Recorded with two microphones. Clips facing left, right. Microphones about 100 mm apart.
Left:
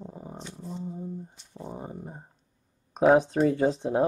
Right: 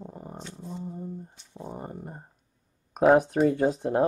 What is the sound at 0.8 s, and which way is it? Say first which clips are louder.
Speech: left 1 dB; 5° right (ahead or behind).